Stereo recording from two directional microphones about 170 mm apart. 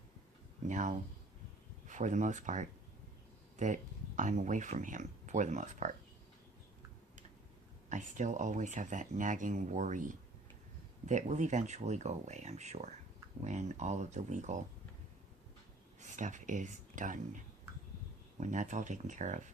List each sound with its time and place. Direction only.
0.7 s speech: 45° right (ahead or behind)
7.9 s speech: 45° right (ahead or behind)
16.0 s speech: 45° right (ahead or behind)